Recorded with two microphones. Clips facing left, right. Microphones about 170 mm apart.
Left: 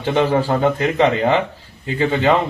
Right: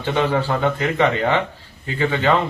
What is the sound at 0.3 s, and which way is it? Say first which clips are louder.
Speech: left 3 dB; 20° left (ahead or behind).